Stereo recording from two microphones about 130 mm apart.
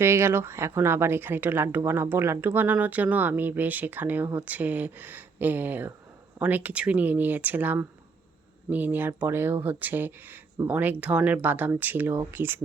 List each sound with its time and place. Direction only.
0.0 s speech: 20° right (ahead or behind)